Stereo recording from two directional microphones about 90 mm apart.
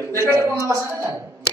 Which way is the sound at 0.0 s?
35° right (ahead or behind).